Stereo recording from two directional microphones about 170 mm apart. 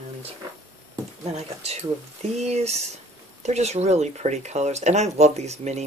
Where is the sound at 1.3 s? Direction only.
40° right (ahead or behind).